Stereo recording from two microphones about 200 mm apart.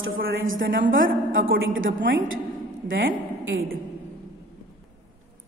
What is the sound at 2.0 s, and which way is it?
A woman's voice, 70° right (ahead or behind).